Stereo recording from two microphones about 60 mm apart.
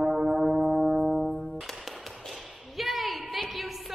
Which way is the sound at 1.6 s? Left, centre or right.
Centre.